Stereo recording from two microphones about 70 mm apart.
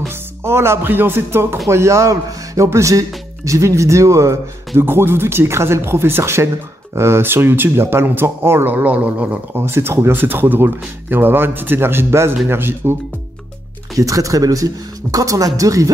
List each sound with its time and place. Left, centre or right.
0.4 s speech: right
4.8 s speech: right
9.5 s speech: right
13.9 s speech: right